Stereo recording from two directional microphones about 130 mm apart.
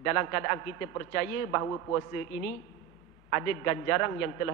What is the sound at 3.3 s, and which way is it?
A man's voice, 20° left (ahead or behind).